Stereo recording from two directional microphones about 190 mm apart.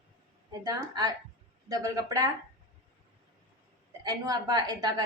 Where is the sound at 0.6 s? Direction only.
20° right (ahead or behind).